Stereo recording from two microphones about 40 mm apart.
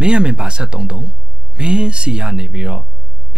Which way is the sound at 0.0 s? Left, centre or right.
Right.